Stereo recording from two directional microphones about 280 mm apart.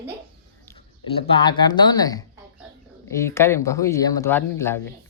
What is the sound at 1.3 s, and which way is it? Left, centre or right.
Speech, centre.